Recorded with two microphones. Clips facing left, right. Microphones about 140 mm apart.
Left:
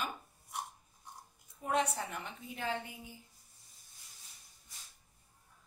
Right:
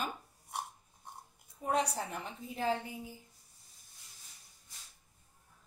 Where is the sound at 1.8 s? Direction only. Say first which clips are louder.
Even; 35° right (ahead or behind).